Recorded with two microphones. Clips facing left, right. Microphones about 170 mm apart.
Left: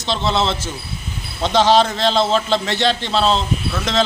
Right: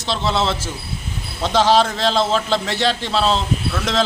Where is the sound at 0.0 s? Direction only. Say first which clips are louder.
Left 1 dB; 5° right (ahead or behind).